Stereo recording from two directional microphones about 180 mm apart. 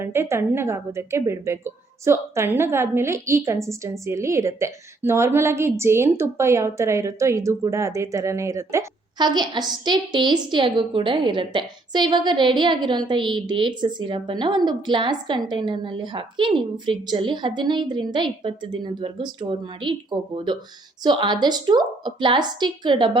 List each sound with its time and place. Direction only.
0.0 s a woman's voice: 15° right (ahead or behind)